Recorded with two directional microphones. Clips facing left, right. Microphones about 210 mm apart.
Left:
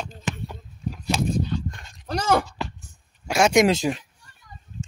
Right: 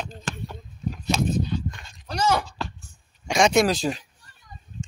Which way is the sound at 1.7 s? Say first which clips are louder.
Left 6 dB; 50° left (ahead or behind).